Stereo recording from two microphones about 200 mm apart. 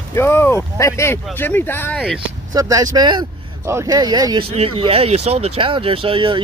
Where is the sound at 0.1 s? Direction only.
10° left (ahead or behind).